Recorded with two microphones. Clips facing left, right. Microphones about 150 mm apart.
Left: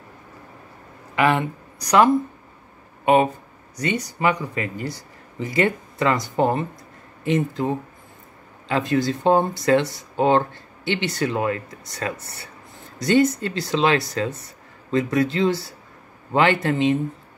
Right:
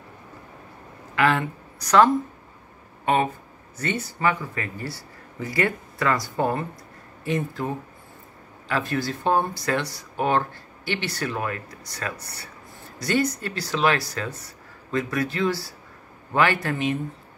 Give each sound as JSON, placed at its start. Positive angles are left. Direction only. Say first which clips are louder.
{"t": 1.1, "sound": "speech", "louder": "left 2 dB", "side_deg": 15}
{"t": 3.7, "sound": "speech", "louder": "left 3 dB", "side_deg": 15}